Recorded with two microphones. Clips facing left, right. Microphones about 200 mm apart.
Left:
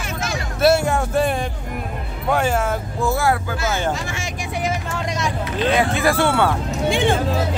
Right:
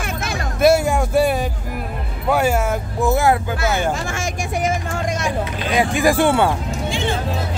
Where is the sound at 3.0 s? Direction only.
20° right (ahead or behind).